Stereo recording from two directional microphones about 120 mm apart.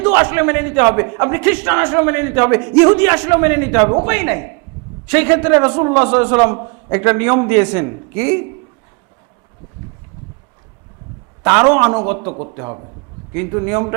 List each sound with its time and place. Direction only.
0.0 s a man's voice: 20° right (ahead or behind)
11.4 s a man's voice: 20° right (ahead or behind)